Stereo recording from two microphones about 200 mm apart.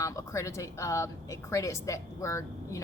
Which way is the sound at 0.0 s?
15° left (ahead or behind).